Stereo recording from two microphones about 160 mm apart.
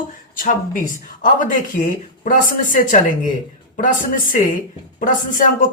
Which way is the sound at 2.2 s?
55° left (ahead or behind).